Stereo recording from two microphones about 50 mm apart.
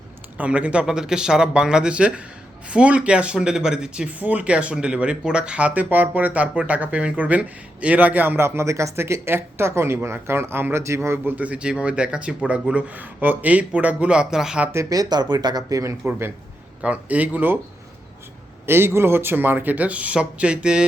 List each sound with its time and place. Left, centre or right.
0.3 s speech: right
0.9 s speech: centre
4.2 s speech: right
4.4 s speech: right
8.4 s speech: right
11.3 s speech: right
12.9 s speech: right
14.1 s speech: centre
16.0 s a man's voice: right
16.8 s speech: right
18.6 s speech: right; by 20.8 s centre